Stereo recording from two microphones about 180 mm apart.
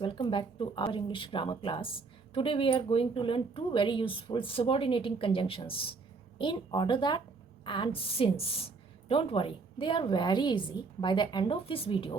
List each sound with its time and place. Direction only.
0.0 s a woman's voice: 30° left (ahead or behind)